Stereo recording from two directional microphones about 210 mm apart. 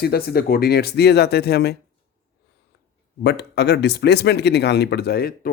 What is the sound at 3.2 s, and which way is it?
Speech, 50° left (ahead or behind).